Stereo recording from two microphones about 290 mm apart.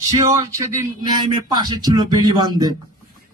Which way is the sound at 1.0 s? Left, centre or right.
Centre.